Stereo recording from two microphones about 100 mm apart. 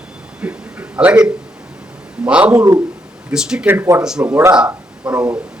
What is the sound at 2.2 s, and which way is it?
Speech, 10° right (ahead or behind).